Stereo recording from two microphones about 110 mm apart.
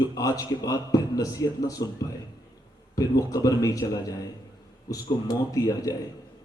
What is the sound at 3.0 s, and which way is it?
A man's voice, 30° left (ahead or behind).